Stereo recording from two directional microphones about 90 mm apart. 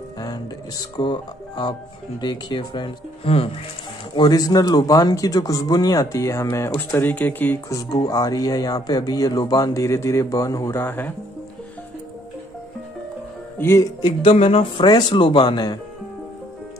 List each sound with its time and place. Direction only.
0.2 s music: 45° left (ahead or behind)
0.9 s speech: 60° left (ahead or behind)
4.1 s speech: 50° left (ahead or behind); by 7.6 s 20° left (ahead or behind)
8.0 s speech: 45° left (ahead or behind); by 11.1 s 20° left (ahead or behind)
13.6 s speech: 30° left (ahead or behind)
14.0 s speech: 90° left; by 15.8 s 50° left (ahead or behind)